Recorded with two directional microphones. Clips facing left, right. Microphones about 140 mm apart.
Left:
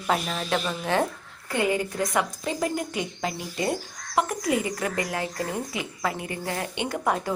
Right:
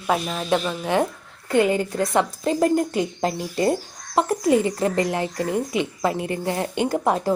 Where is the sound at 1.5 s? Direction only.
25° right (ahead or behind).